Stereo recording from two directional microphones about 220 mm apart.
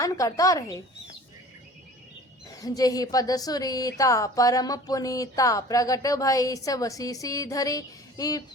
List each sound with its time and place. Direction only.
0.0 s a woman's voice: 15° left (ahead or behind)
2.6 s a woman's voice: 15° left (ahead or behind)